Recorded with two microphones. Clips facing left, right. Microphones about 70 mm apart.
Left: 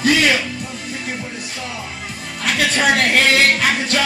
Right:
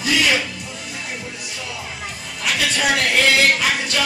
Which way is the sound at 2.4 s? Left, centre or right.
Left.